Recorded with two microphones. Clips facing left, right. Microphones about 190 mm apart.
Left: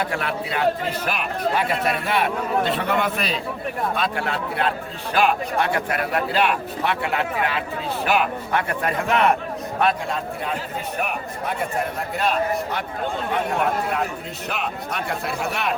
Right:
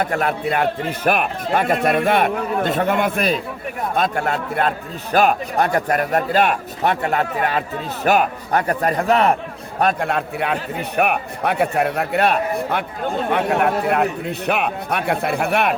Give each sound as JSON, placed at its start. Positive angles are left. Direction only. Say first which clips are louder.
{"t": 0.0, "sound": "a man's voice", "louder": "right 5 dB", "side_deg": -45}
{"t": 9.8, "sound": "a man's voice", "louder": "right 4 dB", "side_deg": -60}